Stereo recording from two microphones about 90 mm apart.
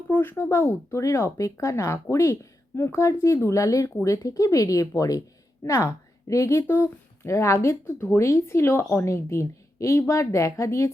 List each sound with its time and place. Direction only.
0.1 s a woman's voice: 25° left (ahead or behind)